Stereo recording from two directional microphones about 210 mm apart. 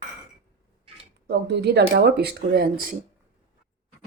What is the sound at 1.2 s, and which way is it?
Speech, 50° right (ahead or behind).